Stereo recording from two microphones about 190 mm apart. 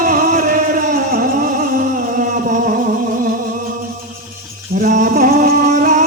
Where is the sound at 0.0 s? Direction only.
45° right (ahead or behind).